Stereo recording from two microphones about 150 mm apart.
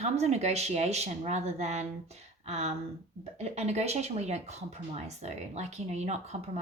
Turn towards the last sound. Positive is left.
turn(degrees=-50)  # may be behind; listen again after turning